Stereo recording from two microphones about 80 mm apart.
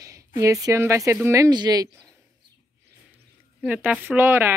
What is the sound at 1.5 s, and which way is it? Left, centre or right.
Speech, right.